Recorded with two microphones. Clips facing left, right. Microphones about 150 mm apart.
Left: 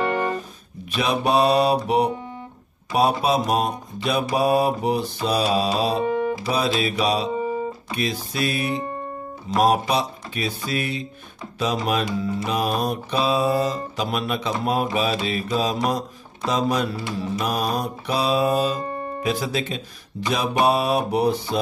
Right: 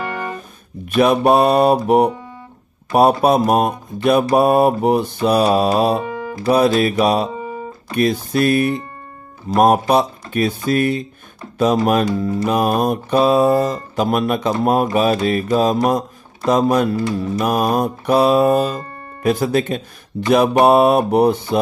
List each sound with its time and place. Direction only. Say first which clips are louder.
0.0 s music: left 3 dB; 25° left (ahead or behind)
0.9 s music: right 7 dB; 55° right (ahead or behind)
2.9 s music: right 7 dB; 50° right (ahead or behind)
6.0 s music: left 4 dB; 25° left (ahead or behind)
6.4 s music: right 8 dB; 55° right (ahead or behind)
15.9 s speech: right 6 dB; 50° right (ahead or behind)
17.4 s music: right 8 dB; 50° right (ahead or behind)